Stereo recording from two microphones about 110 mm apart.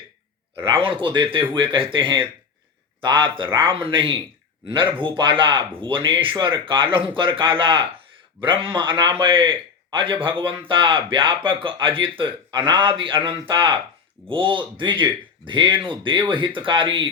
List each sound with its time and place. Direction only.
0.6 s a man's voice: 50° right (ahead or behind)